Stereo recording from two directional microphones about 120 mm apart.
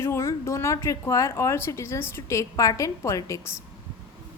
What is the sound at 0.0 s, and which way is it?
Speech, 20° left (ahead or behind).